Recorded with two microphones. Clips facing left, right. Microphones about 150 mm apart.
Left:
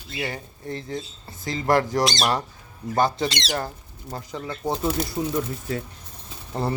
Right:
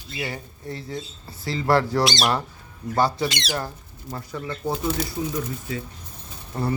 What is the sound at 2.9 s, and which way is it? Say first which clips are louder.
Speech: even; 20° left (ahead or behind).